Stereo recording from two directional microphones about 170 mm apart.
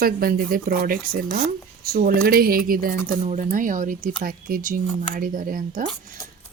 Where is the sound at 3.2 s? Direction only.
45° right (ahead or behind).